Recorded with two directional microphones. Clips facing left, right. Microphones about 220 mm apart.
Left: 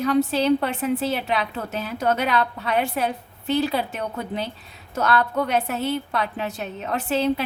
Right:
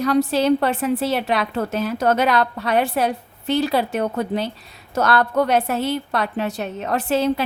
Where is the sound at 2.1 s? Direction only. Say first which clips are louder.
Right 4 dB; 90° right.